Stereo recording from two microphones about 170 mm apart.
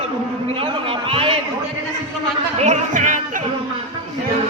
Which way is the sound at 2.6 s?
45° right (ahead or behind).